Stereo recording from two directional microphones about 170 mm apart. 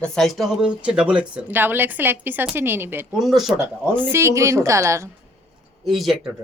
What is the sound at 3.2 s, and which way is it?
Speech, centre (ahead or behind).